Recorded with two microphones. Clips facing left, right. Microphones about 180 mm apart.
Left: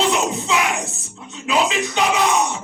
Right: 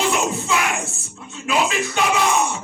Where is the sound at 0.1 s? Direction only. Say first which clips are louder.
Left 1 dB; 20° left (ahead or behind).